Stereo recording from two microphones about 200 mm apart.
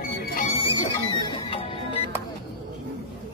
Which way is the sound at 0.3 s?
40° left (ahead or behind).